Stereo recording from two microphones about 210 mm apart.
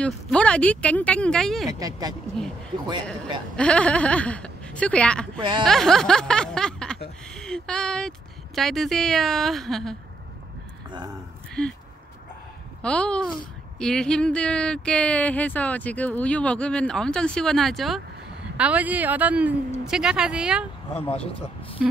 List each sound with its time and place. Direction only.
0.0 s speech: 5° left (ahead or behind)
1.7 s speech: 15° right (ahead or behind)
3.5 s speech: 5° left (ahead or behind)
5.4 s speech: 20° right (ahead or behind)
5.7 s speech: centre (ahead or behind)
11.6 s speech: 5° left (ahead or behind)
12.8 s speech: 5° left (ahead or behind)